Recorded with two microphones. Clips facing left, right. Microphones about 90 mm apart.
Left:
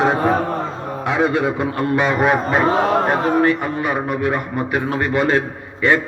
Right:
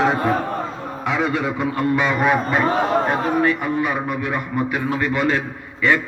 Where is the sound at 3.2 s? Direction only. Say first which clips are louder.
Left 3 dB; 45° left (ahead or behind).